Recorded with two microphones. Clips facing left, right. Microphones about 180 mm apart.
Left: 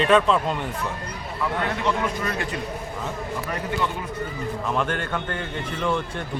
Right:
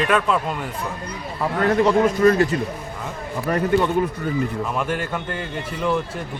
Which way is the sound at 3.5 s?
50° right (ahead or behind).